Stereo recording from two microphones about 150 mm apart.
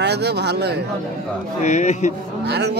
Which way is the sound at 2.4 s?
90° right.